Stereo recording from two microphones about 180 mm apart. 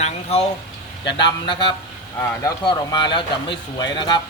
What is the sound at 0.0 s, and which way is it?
Speech, 35° left (ahead or behind).